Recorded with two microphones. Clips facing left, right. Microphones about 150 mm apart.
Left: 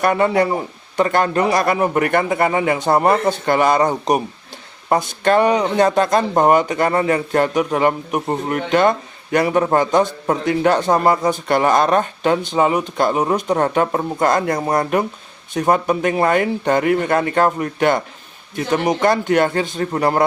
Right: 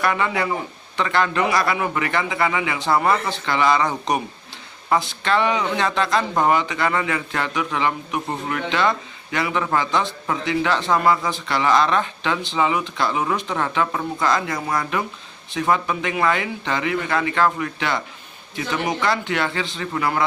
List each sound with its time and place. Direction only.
0.0 s speech: 45° left (ahead or behind)